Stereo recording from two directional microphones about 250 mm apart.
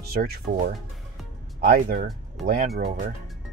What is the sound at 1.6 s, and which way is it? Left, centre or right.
Speech, right.